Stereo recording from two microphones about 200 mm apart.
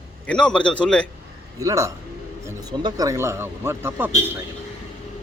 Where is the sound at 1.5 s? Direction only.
15° right (ahead or behind).